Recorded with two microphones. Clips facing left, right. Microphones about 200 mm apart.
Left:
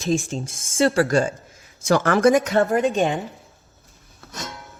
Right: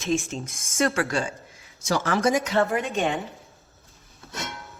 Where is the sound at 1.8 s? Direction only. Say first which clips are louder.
Left 6 dB; 55° left (ahead or behind).